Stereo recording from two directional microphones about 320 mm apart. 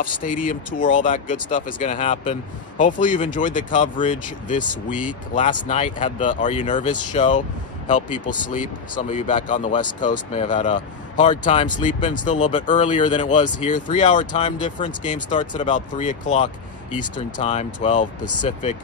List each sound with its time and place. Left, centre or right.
0.5 s speech: left
8.9 s speech: left